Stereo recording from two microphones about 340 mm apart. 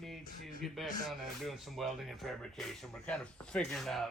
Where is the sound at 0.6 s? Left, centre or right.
Centre.